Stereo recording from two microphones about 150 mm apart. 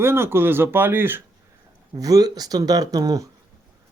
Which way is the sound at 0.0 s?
15° right (ahead or behind).